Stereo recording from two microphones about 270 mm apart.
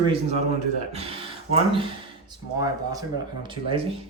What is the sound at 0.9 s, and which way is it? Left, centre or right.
Speech, right.